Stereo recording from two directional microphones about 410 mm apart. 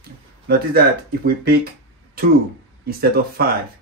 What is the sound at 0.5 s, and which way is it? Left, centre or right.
Speech, right.